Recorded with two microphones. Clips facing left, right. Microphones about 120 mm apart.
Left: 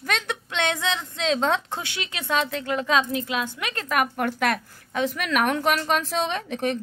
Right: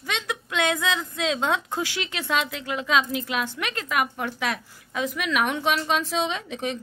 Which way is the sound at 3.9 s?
50° left (ahead or behind).